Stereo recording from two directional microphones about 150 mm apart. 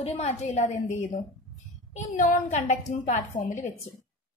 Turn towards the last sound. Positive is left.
turn(degrees=60)  # may be behind; listen again after turning